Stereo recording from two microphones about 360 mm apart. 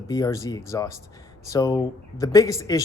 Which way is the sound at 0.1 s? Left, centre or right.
Centre.